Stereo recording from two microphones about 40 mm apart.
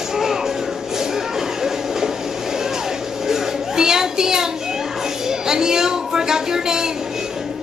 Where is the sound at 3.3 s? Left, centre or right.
Centre.